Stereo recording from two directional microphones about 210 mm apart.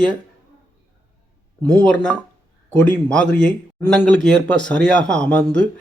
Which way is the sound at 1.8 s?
5° left (ahead or behind).